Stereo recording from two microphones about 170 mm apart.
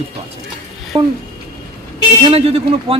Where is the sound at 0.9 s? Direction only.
30° right (ahead or behind).